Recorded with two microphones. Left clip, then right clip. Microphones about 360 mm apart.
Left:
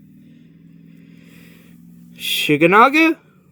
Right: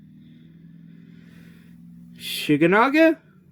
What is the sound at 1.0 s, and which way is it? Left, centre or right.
Vehicle, centre.